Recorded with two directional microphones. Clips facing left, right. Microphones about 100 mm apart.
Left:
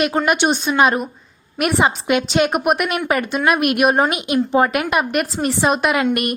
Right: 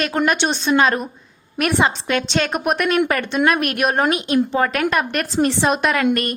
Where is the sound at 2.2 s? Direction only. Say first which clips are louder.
Left 3 dB; 5° left (ahead or behind).